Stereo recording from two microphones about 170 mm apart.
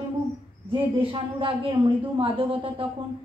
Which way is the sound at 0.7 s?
30° right (ahead or behind).